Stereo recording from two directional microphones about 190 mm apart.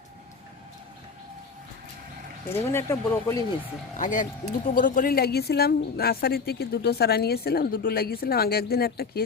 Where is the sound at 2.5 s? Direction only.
15° left (ahead or behind).